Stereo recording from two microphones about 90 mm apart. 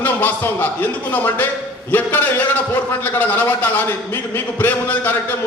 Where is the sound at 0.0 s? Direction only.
20° left (ahead or behind).